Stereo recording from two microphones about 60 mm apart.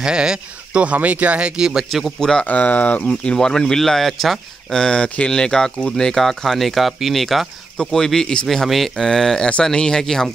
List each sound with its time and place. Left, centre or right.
0.0 s speech: centre
1.6 s a man's voice: centre
2.1 s speech: centre
2.4 s speech: left
3.1 s speech: centre